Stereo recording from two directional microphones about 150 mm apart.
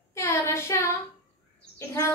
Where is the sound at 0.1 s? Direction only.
20° left (ahead or behind).